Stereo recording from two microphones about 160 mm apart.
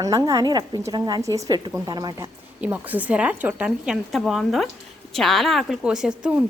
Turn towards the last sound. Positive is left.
turn(degrees=-5)  # may be behind; listen again after turning